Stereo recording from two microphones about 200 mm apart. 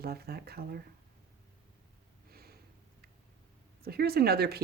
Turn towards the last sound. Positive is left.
turn(degrees=-50)  # may be behind; listen again after turning